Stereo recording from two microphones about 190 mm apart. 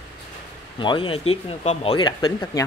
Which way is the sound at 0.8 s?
25° left (ahead or behind).